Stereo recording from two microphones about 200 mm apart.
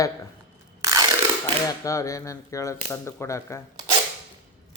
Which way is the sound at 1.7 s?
15° left (ahead or behind).